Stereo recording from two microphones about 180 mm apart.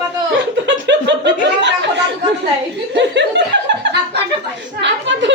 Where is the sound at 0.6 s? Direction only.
75° right (ahead or behind).